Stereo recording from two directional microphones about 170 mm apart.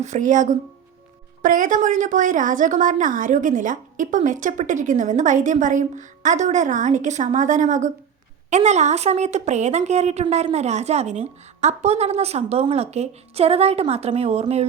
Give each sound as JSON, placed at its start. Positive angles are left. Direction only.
{"t": 0.0, "sound": "a woman's voice", "side_deg": -45}